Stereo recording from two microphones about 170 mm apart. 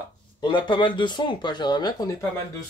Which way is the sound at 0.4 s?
25° left (ahead or behind).